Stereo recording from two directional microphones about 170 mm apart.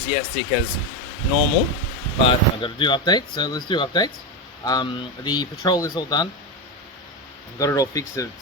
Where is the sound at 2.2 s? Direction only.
30° left (ahead or behind).